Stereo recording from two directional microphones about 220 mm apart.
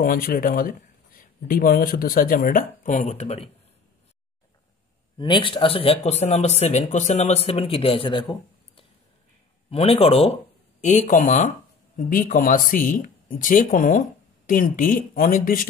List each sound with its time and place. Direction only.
0.0 s speech: 40° left (ahead or behind)
5.1 s speech: 20° left (ahead or behind); by 15.6 s 40° left (ahead or behind)